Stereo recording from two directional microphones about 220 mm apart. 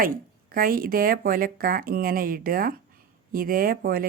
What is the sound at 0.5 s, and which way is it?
Speech, 40° right (ahead or behind).